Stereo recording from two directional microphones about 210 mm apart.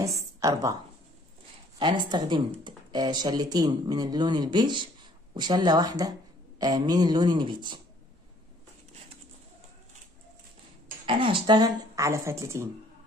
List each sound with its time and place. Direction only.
0.0 s a sound: 15° right (ahead or behind)
1.8 s speech: 20° right (ahead or behind)
11.1 s speech: 25° right (ahead or behind)